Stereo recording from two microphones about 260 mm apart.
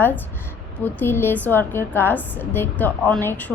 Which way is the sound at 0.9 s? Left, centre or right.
Centre.